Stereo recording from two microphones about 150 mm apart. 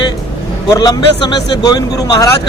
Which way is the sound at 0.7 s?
25° left (ahead or behind).